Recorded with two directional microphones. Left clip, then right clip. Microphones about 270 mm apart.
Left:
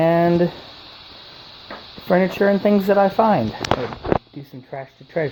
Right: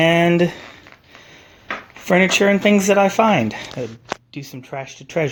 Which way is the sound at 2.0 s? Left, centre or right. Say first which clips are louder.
Right 2 dB; right.